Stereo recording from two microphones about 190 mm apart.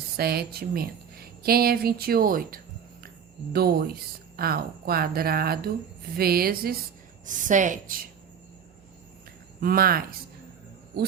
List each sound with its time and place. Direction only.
0.2 s speech: 55° right (ahead or behind)
9.6 s speech: 50° right (ahead or behind)